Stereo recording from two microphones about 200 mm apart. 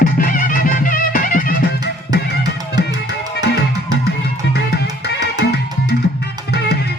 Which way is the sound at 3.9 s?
55° left (ahead or behind).